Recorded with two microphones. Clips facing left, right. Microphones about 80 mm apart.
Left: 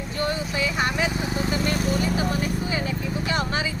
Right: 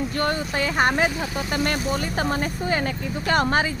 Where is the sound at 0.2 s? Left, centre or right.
Right.